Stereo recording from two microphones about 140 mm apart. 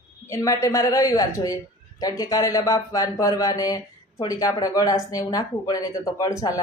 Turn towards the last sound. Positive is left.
turn(degrees=25)  # may be behind; listen again after turning